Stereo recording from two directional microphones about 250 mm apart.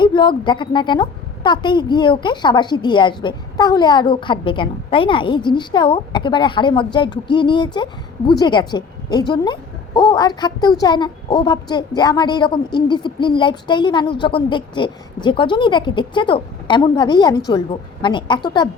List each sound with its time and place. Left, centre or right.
0.0 s a woman's voice: centre